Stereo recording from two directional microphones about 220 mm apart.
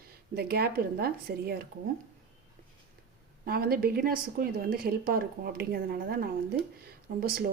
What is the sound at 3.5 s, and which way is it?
A woman's voice, 45° right (ahead or behind).